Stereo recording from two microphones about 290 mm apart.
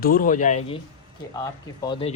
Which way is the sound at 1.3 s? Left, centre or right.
Centre.